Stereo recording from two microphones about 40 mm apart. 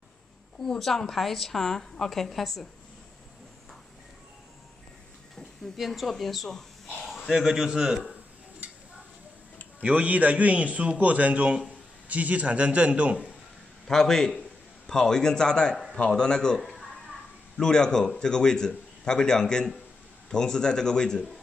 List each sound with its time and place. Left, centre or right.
0.7 s a man's voice: centre
5.8 s speech: centre
7.1 s a man's voice: centre
9.8 s a man's voice: right
13.8 s a man's voice: centre